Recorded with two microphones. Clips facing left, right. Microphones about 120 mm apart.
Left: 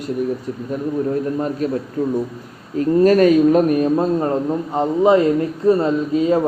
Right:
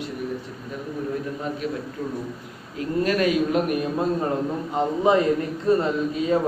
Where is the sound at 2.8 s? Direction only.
40° left (ahead or behind).